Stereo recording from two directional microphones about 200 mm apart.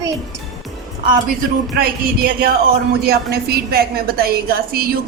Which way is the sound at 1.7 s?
50° right (ahead or behind).